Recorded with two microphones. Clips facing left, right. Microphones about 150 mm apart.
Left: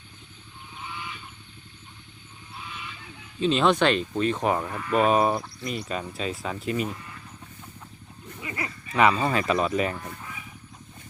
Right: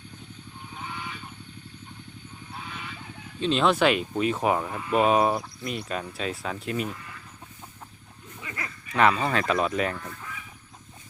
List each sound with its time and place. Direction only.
0.8 s vehicle: 45° right (ahead or behind)
2.6 s a sound: 45° right (ahead or behind)
3.4 s speech: centre (ahead or behind)
8.4 s speech: 10° left (ahead or behind)
9.9 s fowl: 20° left (ahead or behind)